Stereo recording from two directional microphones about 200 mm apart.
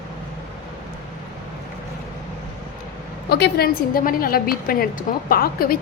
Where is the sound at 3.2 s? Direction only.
55° left (ahead or behind).